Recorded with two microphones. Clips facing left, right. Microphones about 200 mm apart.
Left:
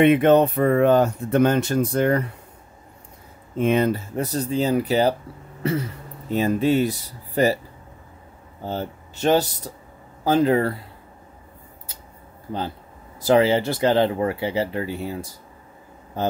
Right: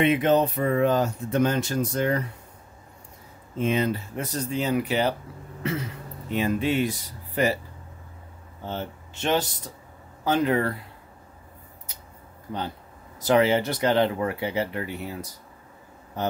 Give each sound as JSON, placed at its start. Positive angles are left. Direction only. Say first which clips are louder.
{"t": 0.0, "sound": "speech", "louder": "left 6 dB", "side_deg": 60}
{"t": 3.5, "sound": "speech", "louder": "left 5 dB", "side_deg": 55}
{"t": 4.2, "sound": "speech", "louder": "left 6 dB", "side_deg": 35}
{"t": 5.6, "sound": "a sound", "louder": "left 5 dB", "side_deg": 40}
{"t": 6.3, "sound": "speech", "louder": "left 5 dB", "side_deg": 40}
{"t": 8.6, "sound": "speech", "louder": "left 4 dB", "side_deg": 40}
{"t": 13.2, "sound": "speech", "louder": "left 3 dB", "side_deg": 30}